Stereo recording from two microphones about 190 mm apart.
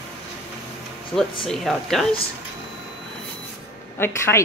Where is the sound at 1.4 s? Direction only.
Centre (ahead or behind).